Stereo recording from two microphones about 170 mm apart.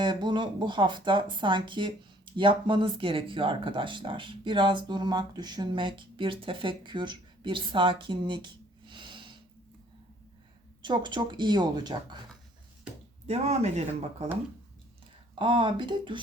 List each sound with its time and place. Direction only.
0.0 s speech: 25° right (ahead or behind)
10.8 s speech: 25° right (ahead or behind)
13.2 s speech: 40° right (ahead or behind)
15.4 s speech: 30° right (ahead or behind)